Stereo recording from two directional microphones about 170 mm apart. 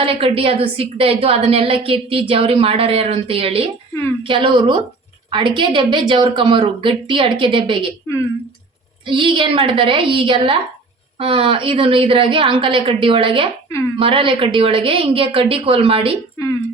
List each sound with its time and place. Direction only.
0.0 s a woman's voice: 35° right (ahead or behind)
9.0 s a woman's voice: 30° right (ahead or behind)